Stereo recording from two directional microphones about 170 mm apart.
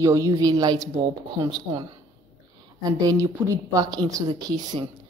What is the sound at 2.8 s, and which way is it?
Speech, 20° right (ahead or behind).